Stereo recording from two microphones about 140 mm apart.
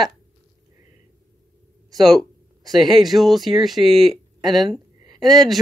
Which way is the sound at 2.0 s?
Centre (ahead or behind).